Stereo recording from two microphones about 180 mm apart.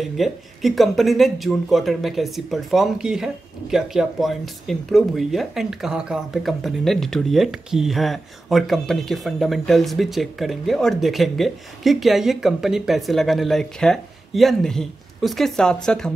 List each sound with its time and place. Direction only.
0.0 s speech: centre (ahead or behind)